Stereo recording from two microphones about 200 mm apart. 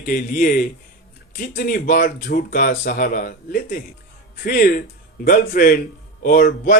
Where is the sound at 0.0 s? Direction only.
40° left (ahead or behind).